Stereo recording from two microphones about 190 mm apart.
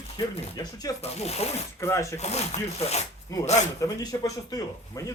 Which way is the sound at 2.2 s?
35° left (ahead or behind).